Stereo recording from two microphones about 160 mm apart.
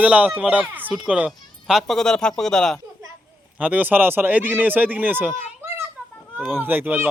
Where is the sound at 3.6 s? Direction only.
10° right (ahead or behind).